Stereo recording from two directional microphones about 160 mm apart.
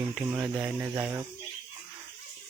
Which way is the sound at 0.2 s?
10° right (ahead or behind).